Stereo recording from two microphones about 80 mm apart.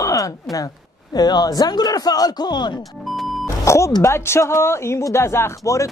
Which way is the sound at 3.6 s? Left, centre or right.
Left.